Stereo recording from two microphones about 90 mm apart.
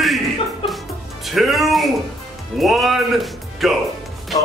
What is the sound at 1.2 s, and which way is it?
Speech, centre (ahead or behind).